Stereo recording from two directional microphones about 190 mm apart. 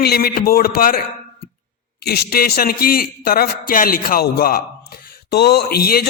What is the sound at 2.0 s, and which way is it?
Speech, 55° left (ahead or behind).